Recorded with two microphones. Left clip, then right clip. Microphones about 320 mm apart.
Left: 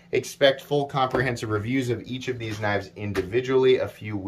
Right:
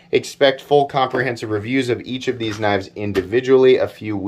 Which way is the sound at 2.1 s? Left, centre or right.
Centre.